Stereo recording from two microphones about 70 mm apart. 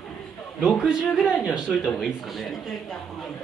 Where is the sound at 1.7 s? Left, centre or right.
Centre.